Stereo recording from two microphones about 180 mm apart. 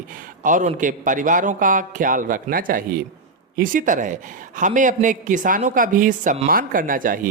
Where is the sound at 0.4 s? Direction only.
45° right (ahead or behind).